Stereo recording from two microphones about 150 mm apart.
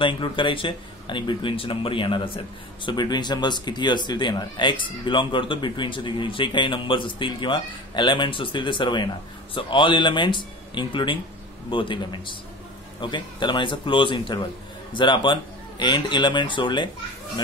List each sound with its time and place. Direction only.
0.0 s speech: 35° left (ahead or behind)